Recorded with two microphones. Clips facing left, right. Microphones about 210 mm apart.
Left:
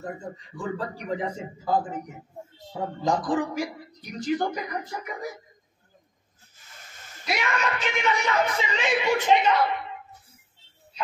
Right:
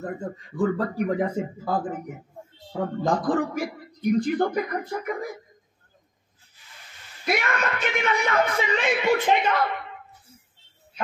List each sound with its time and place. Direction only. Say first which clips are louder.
0.6 s speech: right 9 dB; 55° right (ahead or behind)
6.5 s a sound: left 1 dB; 45° left (ahead or behind)
7.2 s speech: right 2 dB; 55° right (ahead or behind)